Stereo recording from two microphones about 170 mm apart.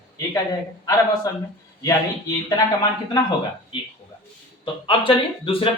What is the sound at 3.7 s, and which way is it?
Speech, 30° left (ahead or behind).